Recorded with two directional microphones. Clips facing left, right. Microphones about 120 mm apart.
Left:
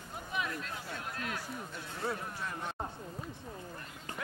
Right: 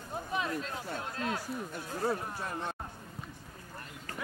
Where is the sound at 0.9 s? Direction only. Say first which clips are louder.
Right 5 dB; 30° right (ahead or behind).